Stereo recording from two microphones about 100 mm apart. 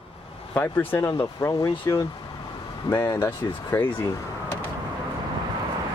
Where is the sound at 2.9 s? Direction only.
20° left (ahead or behind).